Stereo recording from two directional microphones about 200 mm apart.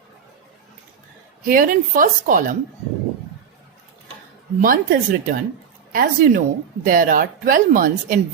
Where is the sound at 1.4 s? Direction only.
45° right (ahead or behind).